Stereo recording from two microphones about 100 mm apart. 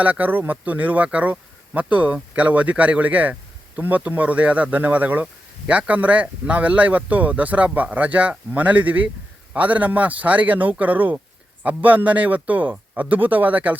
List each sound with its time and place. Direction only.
0.0 s speech: 15° right (ahead or behind)